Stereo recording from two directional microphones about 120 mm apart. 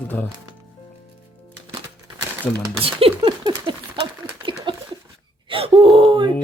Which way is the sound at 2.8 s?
45° right (ahead or behind).